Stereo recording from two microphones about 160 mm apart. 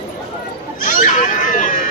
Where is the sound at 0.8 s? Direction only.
55° left (ahead or behind).